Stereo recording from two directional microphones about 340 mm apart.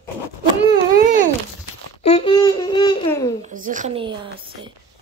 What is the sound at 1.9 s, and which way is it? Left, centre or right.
Babbling, centre.